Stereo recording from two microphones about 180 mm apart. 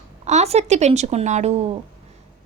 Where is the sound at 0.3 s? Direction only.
40° right (ahead or behind).